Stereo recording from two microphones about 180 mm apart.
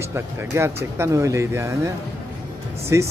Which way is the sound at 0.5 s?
15° right (ahead or behind).